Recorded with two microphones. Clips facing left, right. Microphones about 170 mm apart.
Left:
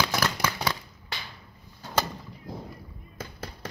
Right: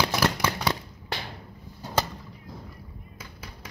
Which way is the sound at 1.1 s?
55° right (ahead or behind).